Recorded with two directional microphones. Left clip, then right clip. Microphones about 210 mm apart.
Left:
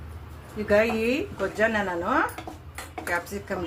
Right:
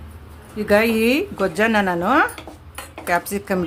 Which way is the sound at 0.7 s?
45° right (ahead or behind).